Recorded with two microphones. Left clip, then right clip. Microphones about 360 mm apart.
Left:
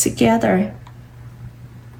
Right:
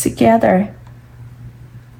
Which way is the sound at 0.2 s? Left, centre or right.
Centre.